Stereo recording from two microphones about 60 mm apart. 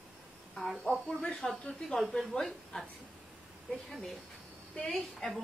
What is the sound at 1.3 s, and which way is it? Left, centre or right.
Speech, centre.